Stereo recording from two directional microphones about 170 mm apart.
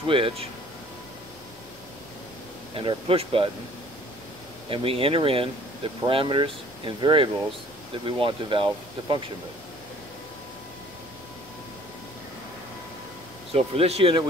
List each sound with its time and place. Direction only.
0.0 s speech: 30° right (ahead or behind)
2.7 s speech: 30° right (ahead or behind)
4.6 s speech: 35° right (ahead or behind)
13.5 s speech: 35° right (ahead or behind)